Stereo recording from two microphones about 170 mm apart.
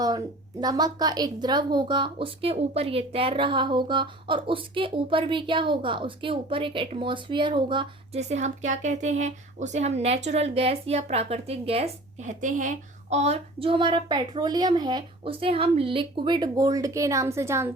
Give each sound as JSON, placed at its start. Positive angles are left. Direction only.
{"t": 0.6, "sound": "speech", "side_deg": -20}
{"t": 8.2, "sound": "a woman's voice", "side_deg": -40}